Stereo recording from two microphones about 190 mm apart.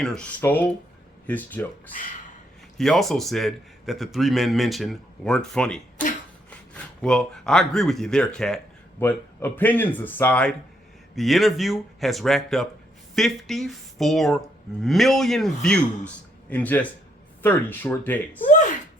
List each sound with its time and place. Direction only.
0.0 s speech: 5° left (ahead or behind)
2.7 s a man's voice: centre (ahead or behind)
18.4 s a sound: 40° left (ahead or behind)